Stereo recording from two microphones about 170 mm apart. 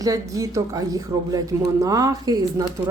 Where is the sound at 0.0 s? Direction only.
20° right (ahead or behind).